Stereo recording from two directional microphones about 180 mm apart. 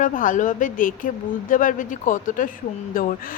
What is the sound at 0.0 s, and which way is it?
Speech, 45° left (ahead or behind).